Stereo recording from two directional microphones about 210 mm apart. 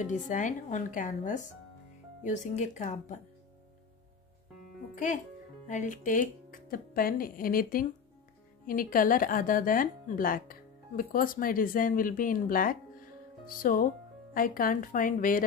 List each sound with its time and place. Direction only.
0.0 s speech: 35° left (ahead or behind)
4.9 s speech: 35° left (ahead or behind)